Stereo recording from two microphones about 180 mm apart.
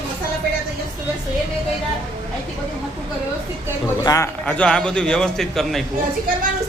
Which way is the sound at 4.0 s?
20° left (ahead or behind).